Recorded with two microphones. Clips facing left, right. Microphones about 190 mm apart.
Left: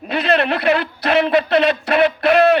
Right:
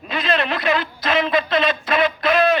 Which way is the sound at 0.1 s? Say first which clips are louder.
Left 4 dB; 60° left (ahead or behind).